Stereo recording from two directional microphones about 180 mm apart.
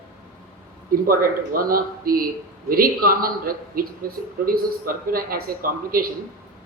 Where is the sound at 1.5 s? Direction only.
50° right (ahead or behind).